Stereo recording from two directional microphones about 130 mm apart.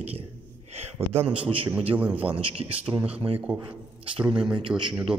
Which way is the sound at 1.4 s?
45° right (ahead or behind).